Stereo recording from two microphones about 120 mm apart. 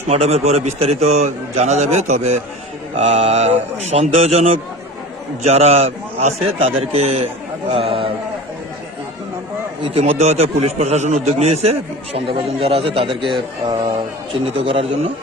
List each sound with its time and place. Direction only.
0.1 s a man's voice: 60° right (ahead or behind)
2.9 s a man's voice: 55° right (ahead or behind)
10.0 s a man's voice: 65° right (ahead or behind); by 15.1 s 50° right (ahead or behind)